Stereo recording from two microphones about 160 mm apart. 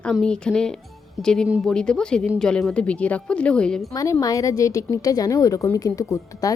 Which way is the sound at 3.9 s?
20° left (ahead or behind).